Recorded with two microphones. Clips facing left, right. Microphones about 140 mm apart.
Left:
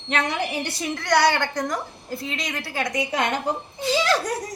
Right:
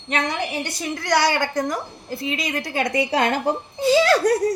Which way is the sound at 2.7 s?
25° right (ahead or behind).